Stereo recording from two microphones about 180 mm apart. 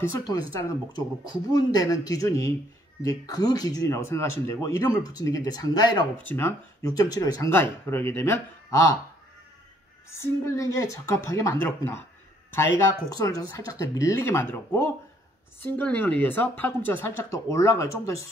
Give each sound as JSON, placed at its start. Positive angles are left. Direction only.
{"t": 0.6, "sound": "speech", "side_deg": 20}
{"t": 10.0, "sound": "speech", "side_deg": 15}